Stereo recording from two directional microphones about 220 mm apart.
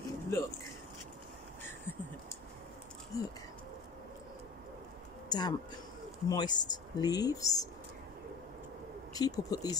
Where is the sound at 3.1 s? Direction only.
15° left (ahead or behind).